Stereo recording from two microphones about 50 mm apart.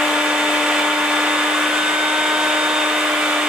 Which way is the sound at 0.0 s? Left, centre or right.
Centre.